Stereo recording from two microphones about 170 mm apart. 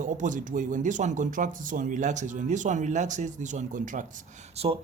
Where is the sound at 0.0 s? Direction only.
50° right (ahead or behind).